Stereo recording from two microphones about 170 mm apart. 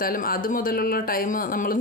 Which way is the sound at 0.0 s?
55° left (ahead or behind).